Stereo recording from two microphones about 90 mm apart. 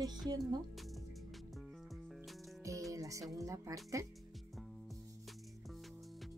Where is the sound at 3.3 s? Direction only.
40° right (ahead or behind).